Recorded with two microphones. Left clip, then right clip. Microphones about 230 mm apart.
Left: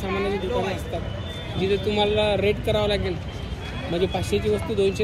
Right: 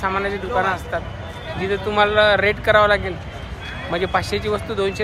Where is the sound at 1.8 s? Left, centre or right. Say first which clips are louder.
Right 9 dB; centre.